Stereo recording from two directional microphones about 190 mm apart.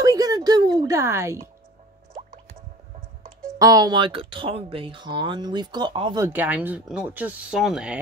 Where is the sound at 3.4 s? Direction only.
20° right (ahead or behind).